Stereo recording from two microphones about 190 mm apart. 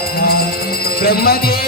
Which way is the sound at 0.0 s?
55° left (ahead or behind).